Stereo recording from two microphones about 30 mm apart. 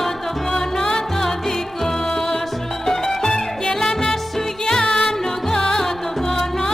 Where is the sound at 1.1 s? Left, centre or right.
Centre.